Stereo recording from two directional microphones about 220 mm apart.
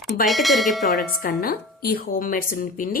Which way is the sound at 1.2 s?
40° left (ahead or behind).